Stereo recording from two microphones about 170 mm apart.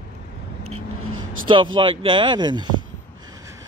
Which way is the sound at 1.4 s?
30° right (ahead or behind).